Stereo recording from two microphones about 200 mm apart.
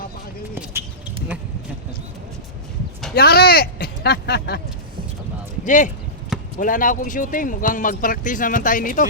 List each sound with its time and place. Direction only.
0.5 s a sound: 10° right (ahead or behind)
3.2 s speech: 50° left (ahead or behind)
5.6 s speech: 40° left (ahead or behind)